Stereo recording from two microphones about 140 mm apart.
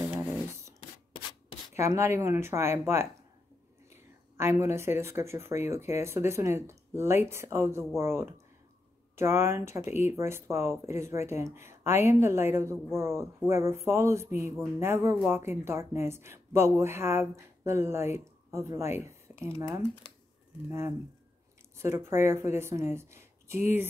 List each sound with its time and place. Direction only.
0.1 s a sound: 15° right (ahead or behind)
1.8 s speech: 20° right (ahead or behind)
4.4 s speech: 15° right (ahead or behind)
21.7 s speech: 20° right (ahead or behind)